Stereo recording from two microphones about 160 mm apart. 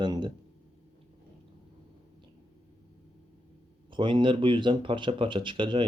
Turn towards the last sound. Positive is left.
turn(degrees=-30)  # may be behind; listen again after turning